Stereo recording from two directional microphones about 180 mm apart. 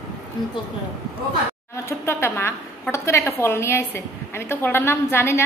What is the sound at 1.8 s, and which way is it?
A woman's voice, 15° left (ahead or behind).